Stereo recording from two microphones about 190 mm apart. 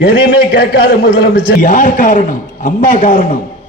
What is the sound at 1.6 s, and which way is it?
A man's voice, 45° left (ahead or behind).